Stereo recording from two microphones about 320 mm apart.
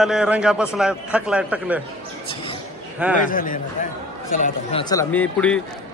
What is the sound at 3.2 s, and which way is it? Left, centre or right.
A man's voice, left.